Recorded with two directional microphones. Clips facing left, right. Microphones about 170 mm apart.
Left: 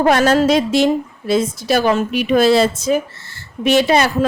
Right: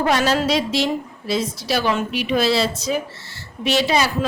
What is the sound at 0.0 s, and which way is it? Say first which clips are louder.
A man's voice: left 6 dB; 50° left (ahead or behind).